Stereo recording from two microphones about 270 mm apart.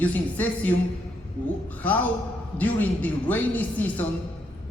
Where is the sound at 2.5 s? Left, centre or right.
Centre.